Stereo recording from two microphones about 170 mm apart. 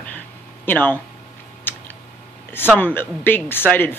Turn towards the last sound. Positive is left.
turn(degrees=10)  # may be behind; listen again after turning